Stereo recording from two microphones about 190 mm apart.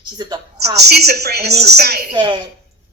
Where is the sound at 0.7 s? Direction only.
55° right (ahead or behind).